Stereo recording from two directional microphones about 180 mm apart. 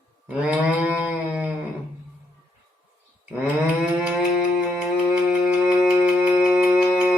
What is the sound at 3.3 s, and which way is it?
Livestock, 5° right (ahead or behind).